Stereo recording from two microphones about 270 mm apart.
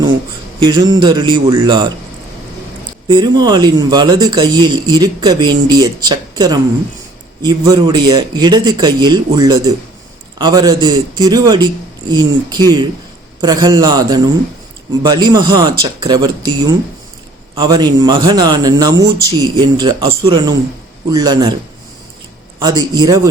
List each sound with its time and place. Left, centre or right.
0.6 s speech: centre
3.1 s speech: centre
22.6 s speech: centre